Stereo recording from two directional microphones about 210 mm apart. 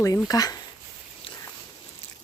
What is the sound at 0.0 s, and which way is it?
Speech, 15° left (ahead or behind).